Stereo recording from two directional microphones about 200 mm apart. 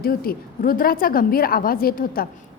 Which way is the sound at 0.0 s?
45° left (ahead or behind).